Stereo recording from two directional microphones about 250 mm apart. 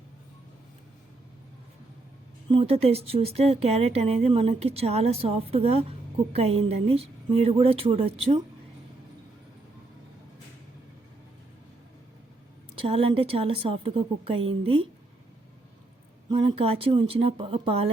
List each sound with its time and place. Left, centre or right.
2.5 s speech: right
12.7 s speech: right
16.3 s speech: right